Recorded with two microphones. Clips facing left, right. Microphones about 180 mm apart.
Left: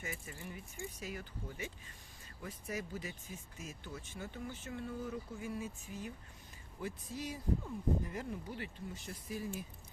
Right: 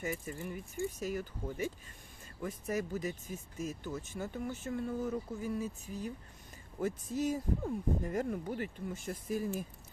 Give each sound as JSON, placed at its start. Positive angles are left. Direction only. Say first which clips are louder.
{"t": 0.0, "sound": "speech", "louder": "right 8 dB", "side_deg": -40}